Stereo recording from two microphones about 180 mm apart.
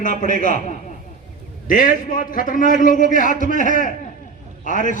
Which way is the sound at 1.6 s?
50° left (ahead or behind).